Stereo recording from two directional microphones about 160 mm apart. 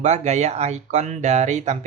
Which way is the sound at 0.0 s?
45° right (ahead or behind).